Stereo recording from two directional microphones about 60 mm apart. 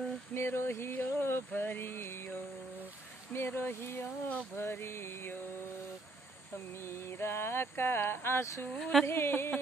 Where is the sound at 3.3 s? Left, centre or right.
Left.